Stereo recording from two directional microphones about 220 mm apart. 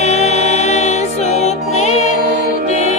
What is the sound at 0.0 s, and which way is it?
Music, 30° left (ahead or behind).